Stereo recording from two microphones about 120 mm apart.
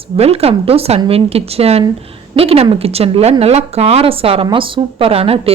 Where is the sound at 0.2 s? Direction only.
60° right (ahead or behind).